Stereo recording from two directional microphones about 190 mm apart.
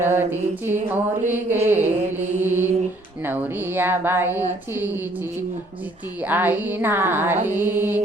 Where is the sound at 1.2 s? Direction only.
10° right (ahead or behind).